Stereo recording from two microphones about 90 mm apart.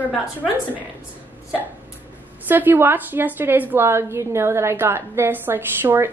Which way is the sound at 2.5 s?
20° right (ahead or behind).